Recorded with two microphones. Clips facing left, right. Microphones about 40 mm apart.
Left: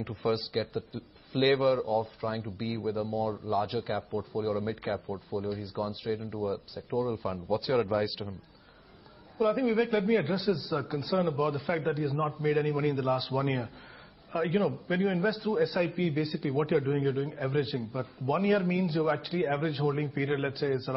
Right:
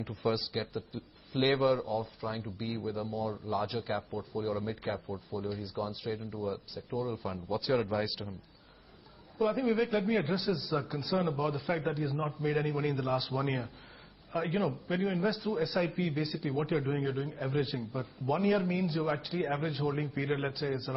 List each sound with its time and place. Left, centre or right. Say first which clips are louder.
0.2 s a man's voice: left 3 dB; centre
3.6 s a man's voice: left 3 dB; centre
3.9 s a man's voice: left 3 dB; centre
9.4 s a man's voice: left 3 dB; centre